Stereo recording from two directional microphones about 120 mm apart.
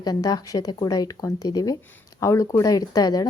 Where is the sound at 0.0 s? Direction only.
30° left (ahead or behind).